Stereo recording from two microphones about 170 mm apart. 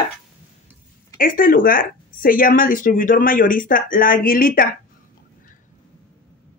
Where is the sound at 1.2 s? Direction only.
55° left (ahead or behind).